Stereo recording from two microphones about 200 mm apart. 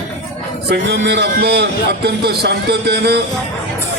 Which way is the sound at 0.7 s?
55° right (ahead or behind).